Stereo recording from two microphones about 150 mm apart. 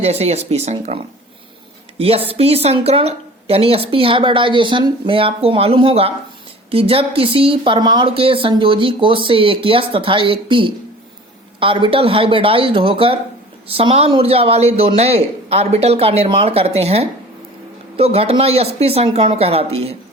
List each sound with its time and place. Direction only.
0.0 s a woman's voice: 45° right (ahead or behind)